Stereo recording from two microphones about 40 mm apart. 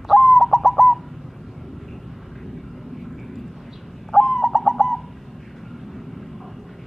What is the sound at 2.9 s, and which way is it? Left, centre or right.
Vehicle, centre.